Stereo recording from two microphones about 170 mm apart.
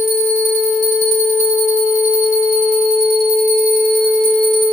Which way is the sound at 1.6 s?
40° left (ahead or behind).